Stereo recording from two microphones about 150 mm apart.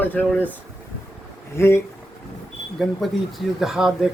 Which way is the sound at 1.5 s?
15° left (ahead or behind).